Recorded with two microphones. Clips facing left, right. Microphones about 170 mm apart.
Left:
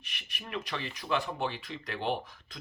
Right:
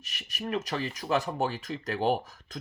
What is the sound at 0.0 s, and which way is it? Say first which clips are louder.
Speech: right 9 dB; 40° right (ahead or behind).